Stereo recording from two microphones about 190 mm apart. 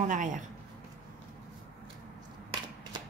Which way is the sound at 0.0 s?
40° right (ahead or behind).